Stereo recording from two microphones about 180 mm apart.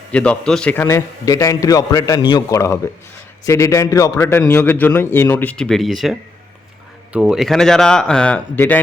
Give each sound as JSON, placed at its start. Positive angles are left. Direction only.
{"t": 0.1, "sound": "a man's voice", "side_deg": 5}